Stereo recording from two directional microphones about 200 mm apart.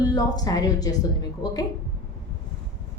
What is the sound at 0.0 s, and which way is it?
Speech, 20° left (ahead or behind).